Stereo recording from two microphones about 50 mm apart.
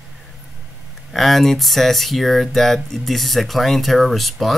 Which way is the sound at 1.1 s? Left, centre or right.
Centre.